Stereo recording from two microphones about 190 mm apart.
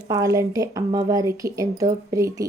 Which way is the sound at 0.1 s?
15° right (ahead or behind).